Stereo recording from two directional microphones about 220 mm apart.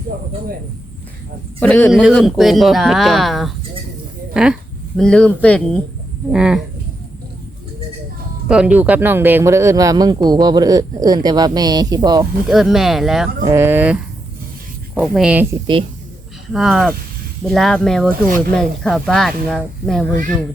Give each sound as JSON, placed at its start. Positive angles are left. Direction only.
{"t": 1.5, "sound": "a man's voice", "side_deg": 5}
{"t": 8.4, "sound": "speech", "side_deg": -5}
{"t": 12.5, "sound": "speech", "side_deg": 0}
{"t": 13.4, "sound": "speech", "side_deg": -10}
{"t": 15.0, "sound": "speech", "side_deg": 0}
{"t": 16.5, "sound": "speech", "side_deg": 0}